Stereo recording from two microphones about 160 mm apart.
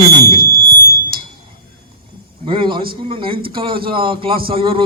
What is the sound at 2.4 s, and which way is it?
A man's voice, 30° right (ahead or behind).